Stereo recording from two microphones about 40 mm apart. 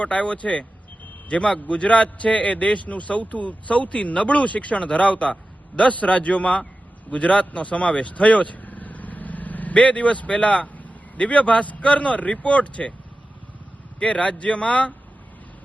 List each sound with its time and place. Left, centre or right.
0.0 s a man's voice: left
14.0 s a man's voice: left